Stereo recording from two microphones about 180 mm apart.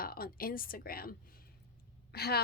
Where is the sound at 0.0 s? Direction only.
55° left (ahead or behind).